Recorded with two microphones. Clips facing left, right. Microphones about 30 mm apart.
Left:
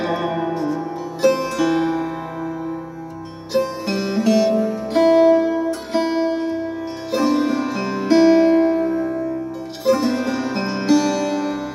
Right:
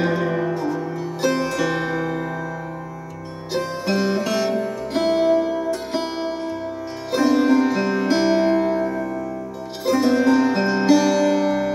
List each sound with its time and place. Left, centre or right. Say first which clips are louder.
0.4 s music: left 1 dB; centre
3.5 s music: left 2 dB; centre
8.6 s music: left 3 dB; right
9.8 s music: right 1 dB; centre